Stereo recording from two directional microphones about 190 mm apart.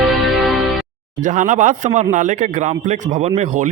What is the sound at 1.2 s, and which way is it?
Speech, 40° right (ahead or behind).